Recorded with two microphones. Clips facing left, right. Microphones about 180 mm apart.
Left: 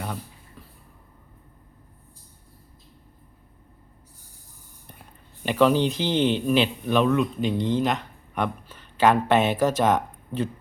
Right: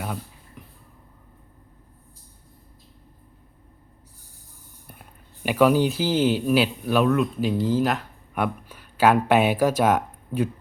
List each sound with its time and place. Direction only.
0.6 s vehicle: 20° right (ahead or behind)
5.4 s speech: 10° right (ahead or behind)